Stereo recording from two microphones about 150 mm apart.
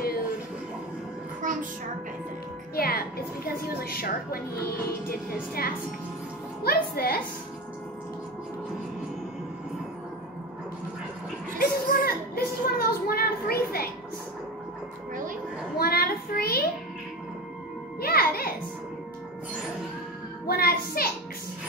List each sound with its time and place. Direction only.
1.4 s music: 60° right (ahead or behind)
2.7 s a woman's voice: 85° left
11.5 s a sound: 75° left (ahead or behind)
15.8 s child singing: 85° left
18.0 s music: 85° left
20.4 s speech: 85° left